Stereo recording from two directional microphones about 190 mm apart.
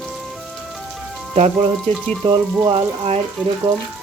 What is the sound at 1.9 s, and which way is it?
Speech, 35° right (ahead or behind).